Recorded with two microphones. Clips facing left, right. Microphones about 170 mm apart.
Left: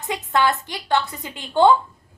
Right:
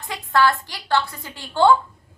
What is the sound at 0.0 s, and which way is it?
A woman's voice, 20° left (ahead or behind).